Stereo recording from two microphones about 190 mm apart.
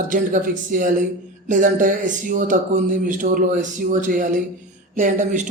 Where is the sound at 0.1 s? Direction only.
45° right (ahead or behind).